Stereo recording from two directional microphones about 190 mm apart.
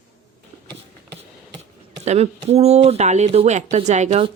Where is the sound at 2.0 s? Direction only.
35° right (ahead or behind).